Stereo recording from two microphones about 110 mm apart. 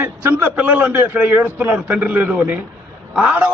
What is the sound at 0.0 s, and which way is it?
A man's voice, 20° right (ahead or behind).